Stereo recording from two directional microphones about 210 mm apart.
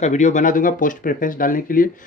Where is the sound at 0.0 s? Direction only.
35° left (ahead or behind).